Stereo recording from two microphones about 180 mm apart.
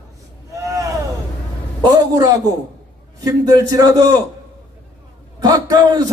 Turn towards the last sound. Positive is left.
turn(degrees=-20)  # may be behind; listen again after turning